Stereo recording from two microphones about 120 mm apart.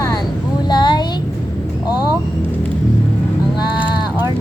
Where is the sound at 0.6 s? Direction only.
35° left (ahead or behind).